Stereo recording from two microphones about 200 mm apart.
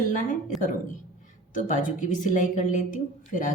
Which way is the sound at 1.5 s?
40° left (ahead or behind).